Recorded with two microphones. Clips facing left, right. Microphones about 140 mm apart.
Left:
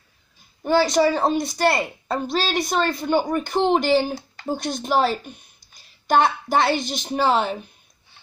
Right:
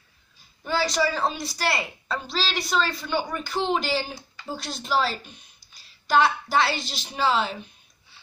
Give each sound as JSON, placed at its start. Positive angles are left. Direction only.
{"t": 0.7, "sound": "a woman's voice", "side_deg": 50}